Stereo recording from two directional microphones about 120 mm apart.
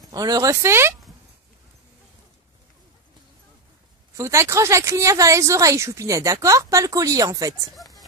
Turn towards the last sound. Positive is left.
turn(degrees=-30)  # may be behind; listen again after turning